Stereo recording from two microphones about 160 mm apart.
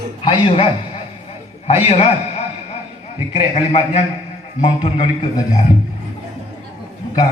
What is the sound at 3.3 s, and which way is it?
Speech, 40° left (ahead or behind).